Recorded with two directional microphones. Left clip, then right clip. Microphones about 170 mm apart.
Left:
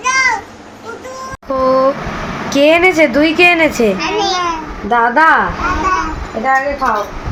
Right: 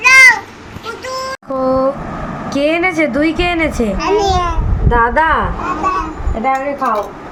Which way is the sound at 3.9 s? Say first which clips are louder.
Right 2 dB; 90° right.